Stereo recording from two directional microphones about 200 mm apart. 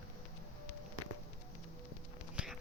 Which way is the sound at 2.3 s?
5° right (ahead or behind).